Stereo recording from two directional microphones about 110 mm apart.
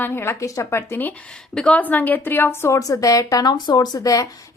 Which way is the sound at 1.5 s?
10° left (ahead or behind).